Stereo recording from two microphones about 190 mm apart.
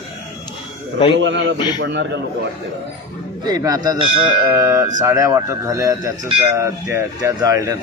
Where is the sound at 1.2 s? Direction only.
75° right (ahead or behind).